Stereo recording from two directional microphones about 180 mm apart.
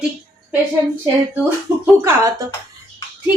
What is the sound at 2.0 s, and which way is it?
Speech, 15° right (ahead or behind).